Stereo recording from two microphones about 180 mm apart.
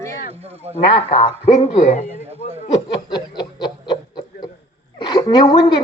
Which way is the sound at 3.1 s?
25° left (ahead or behind).